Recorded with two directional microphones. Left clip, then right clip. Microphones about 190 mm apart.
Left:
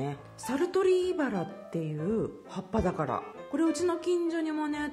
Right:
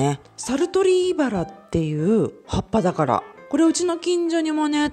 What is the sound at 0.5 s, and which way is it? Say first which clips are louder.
Speech: right 7 dB; 30° right (ahead or behind).